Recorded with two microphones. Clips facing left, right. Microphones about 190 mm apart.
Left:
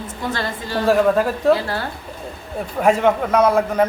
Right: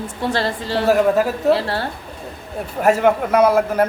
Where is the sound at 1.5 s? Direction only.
30° right (ahead or behind).